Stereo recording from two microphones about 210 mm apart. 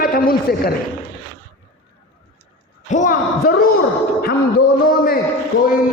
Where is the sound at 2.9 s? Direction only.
40° left (ahead or behind).